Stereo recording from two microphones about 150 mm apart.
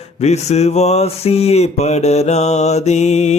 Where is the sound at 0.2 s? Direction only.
45° left (ahead or behind).